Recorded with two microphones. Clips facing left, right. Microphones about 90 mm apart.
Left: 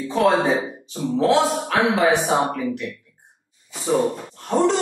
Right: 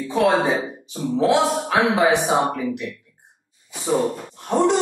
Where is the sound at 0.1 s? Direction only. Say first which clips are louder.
Even; 10° right (ahead or behind).